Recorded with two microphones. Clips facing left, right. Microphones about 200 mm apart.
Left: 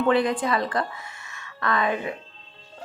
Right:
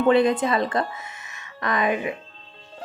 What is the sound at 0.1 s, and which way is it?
A woman's voice, 25° right (ahead or behind).